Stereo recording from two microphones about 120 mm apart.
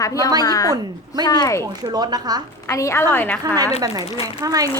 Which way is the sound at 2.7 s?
25° left (ahead or behind).